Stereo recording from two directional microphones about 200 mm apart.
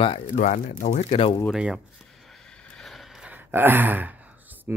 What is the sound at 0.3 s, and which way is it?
Speech, 40° left (ahead or behind).